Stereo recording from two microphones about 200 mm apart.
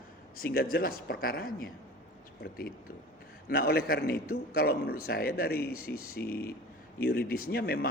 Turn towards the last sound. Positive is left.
turn(degrees=50)  # may be behind; listen again after turning